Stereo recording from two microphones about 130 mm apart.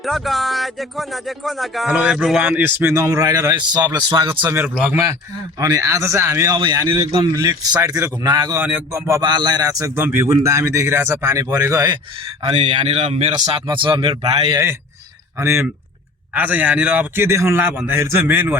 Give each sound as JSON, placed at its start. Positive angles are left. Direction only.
{"t": 0.0, "sound": "speech", "side_deg": 0}
{"t": 1.9, "sound": "a man's voice", "side_deg": -10}
{"t": 2.4, "sound": "a man's voice", "side_deg": -10}
{"t": 4.5, "sound": "a man's voice", "side_deg": -10}
{"t": 5.5, "sound": "a man's voice", "side_deg": -25}
{"t": 6.6, "sound": "a man's voice", "side_deg": -35}
{"t": 8.5, "sound": "a man's voice", "side_deg": -15}
{"t": 9.2, "sound": "a man's voice", "side_deg": -35}
{"t": 12.5, "sound": "speech", "side_deg": -55}
{"t": 13.7, "sound": "speech", "side_deg": -40}
{"t": 14.5, "sound": "a man's voice", "side_deg": -20}